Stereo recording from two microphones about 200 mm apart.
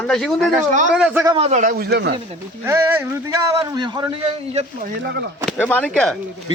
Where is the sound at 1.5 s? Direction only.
40° right (ahead or behind).